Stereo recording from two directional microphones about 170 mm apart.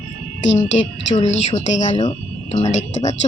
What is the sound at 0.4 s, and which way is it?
Speech, 45° left (ahead or behind).